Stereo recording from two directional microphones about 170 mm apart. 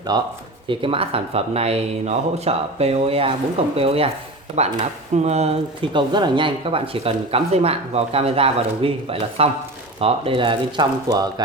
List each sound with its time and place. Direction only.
0.1 s speech: 25° right (ahead or behind)